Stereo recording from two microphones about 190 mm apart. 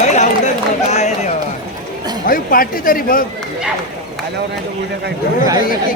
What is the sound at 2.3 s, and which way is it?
Speech, 50° left (ahead or behind).